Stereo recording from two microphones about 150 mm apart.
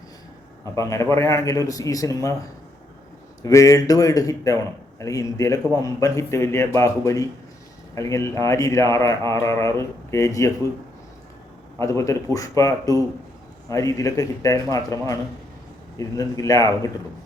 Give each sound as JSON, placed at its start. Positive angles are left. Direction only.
{"t": 0.6, "sound": "a man's voice", "side_deg": 20}
{"t": 3.4, "sound": "a man's voice", "side_deg": 20}
{"t": 11.8, "sound": "a man's voice", "side_deg": 20}